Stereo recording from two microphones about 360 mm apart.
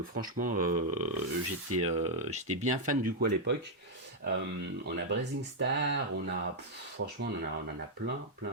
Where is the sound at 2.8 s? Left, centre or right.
Right.